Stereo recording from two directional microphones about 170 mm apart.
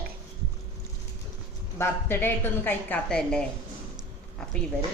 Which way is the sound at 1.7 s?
15° left (ahead or behind).